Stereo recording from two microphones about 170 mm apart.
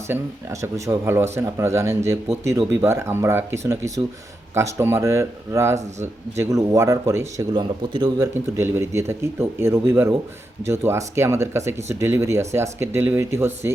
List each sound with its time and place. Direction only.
0.1 s a man's voice: 20° right (ahead or behind)